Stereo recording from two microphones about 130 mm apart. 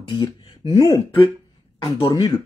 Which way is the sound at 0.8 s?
25° left (ahead or behind).